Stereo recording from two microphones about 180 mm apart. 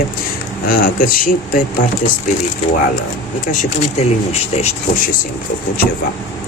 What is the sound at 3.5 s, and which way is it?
Speech, 40° left (ahead or behind).